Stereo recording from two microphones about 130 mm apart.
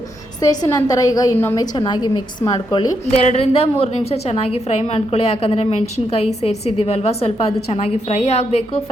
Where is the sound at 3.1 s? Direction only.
55° left (ahead or behind).